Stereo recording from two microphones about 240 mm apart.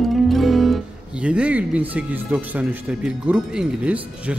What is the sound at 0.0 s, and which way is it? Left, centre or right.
Speech, centre.